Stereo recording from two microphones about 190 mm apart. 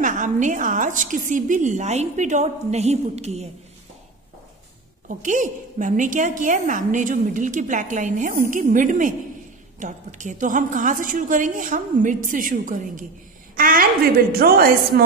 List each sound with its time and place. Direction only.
0.0 s a woman's voice: 40° right (ahead or behind)
5.0 s a woman's voice: 40° right (ahead or behind)